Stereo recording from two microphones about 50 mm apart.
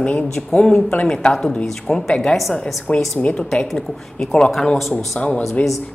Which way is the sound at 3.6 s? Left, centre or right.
Centre.